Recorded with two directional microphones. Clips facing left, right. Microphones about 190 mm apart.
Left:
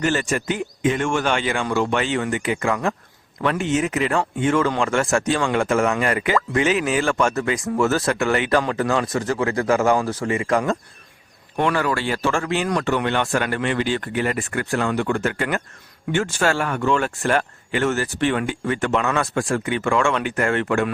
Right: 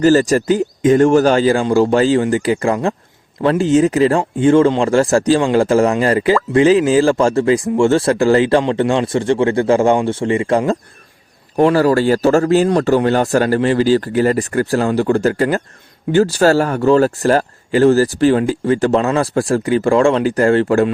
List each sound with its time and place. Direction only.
0.0 s speech: 35° right (ahead or behind)